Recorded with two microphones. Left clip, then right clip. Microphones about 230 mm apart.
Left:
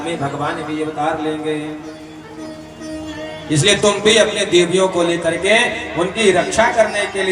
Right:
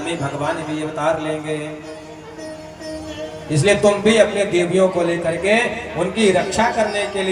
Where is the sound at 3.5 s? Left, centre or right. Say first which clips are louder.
Left 1 dB; right.